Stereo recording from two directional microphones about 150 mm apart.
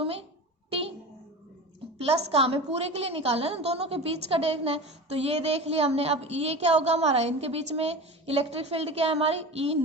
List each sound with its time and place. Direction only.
0.0 s a sound: 40° right (ahead or behind)
0.7 s music: 40° right (ahead or behind)
2.0 s a woman's voice: 40° right (ahead or behind)